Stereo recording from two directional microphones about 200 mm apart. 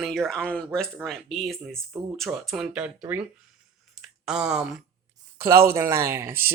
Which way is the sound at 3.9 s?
5° right (ahead or behind).